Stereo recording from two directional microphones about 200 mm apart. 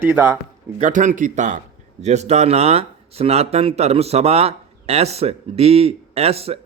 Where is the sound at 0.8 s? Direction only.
40° right (ahead or behind).